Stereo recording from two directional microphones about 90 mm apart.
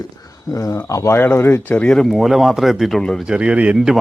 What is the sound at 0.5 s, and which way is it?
Speech, 40° left (ahead or behind).